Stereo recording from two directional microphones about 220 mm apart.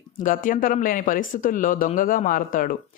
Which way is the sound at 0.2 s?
35° left (ahead or behind).